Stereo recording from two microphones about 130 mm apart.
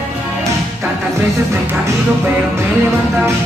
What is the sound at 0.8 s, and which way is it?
Music, 20° right (ahead or behind).